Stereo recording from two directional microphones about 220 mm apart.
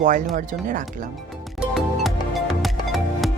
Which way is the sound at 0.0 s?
35° right (ahead or behind).